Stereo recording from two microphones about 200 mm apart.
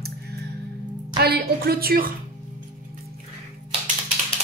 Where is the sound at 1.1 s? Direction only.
50° right (ahead or behind).